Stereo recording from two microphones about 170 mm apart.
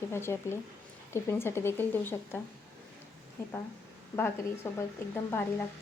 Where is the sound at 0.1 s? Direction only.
15° left (ahead or behind).